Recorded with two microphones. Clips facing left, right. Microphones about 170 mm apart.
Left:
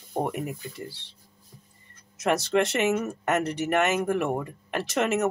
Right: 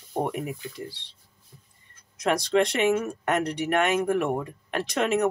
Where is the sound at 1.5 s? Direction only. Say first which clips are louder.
Left 2 dB; 35° left (ahead or behind).